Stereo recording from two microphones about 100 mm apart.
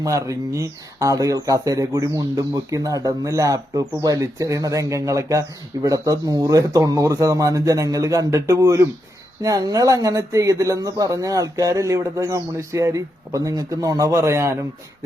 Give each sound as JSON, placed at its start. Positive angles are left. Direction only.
{"t": 0.0, "sound": "speech", "side_deg": -35}